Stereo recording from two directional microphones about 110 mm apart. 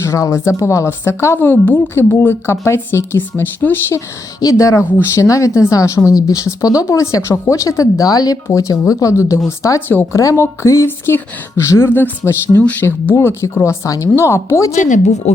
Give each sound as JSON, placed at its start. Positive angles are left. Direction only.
{"t": 0.0, "sound": "speech", "side_deg": 30}
{"t": 14.7, "sound": "speech", "side_deg": 90}